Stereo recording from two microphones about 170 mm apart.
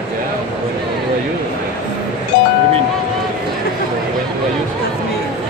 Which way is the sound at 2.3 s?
70° left (ahead or behind).